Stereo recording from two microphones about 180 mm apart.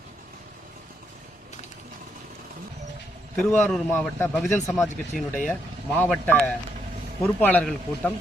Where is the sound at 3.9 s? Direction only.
10° left (ahead or behind).